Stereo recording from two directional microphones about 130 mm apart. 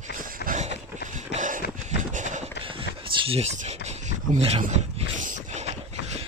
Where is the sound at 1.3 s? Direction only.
80° right.